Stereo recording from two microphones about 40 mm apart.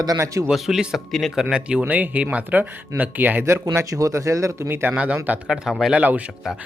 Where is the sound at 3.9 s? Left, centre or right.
Right.